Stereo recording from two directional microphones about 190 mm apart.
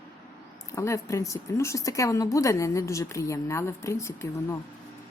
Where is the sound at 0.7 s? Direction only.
15° left (ahead or behind).